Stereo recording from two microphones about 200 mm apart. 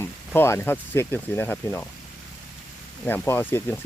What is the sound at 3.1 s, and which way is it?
Speech, 10° left (ahead or behind).